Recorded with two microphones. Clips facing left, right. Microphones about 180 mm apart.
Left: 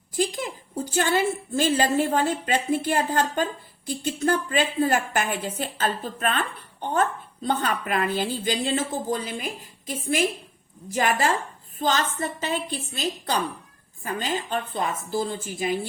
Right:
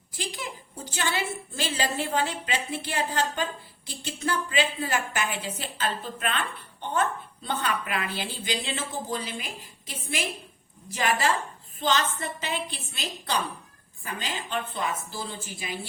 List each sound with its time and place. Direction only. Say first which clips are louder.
0.2 s a woman's voice: left 9 dB; 45° left (ahead or behind)
7.4 s a woman's voice: left 4 dB; 45° left (ahead or behind)